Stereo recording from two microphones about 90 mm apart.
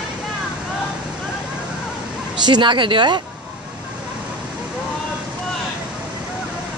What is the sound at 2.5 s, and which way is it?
Speech, 65° right (ahead or behind).